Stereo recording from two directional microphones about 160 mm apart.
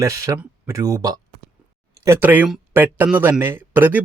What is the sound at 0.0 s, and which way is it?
Speech, 20° right (ahead or behind).